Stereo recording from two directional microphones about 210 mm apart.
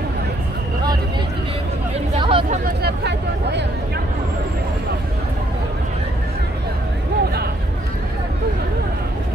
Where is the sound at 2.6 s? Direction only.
50° right (ahead or behind).